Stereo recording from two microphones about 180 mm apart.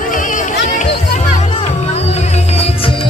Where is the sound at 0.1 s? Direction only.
45° left (ahead or behind).